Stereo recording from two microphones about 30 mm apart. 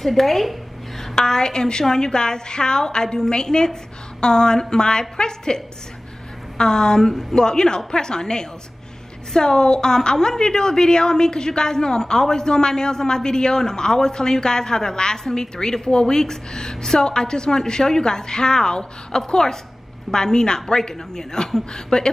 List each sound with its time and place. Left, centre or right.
0.0 s speech: centre
1.1 s a woman's voice: left
6.6 s a woman's voice: left